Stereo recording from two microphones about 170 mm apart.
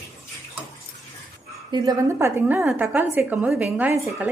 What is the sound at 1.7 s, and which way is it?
A woman's voice, 20° right (ahead or behind).